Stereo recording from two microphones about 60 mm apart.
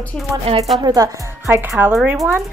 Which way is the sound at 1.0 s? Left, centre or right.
Right.